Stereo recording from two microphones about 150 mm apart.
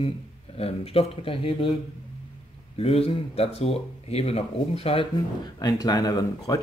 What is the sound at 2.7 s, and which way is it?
Speech, 40° left (ahead or behind).